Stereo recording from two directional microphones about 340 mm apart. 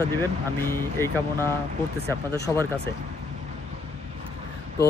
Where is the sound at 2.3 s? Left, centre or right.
Centre.